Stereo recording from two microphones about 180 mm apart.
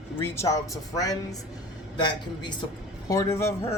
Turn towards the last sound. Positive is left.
turn(degrees=15)  # may be behind; listen again after turning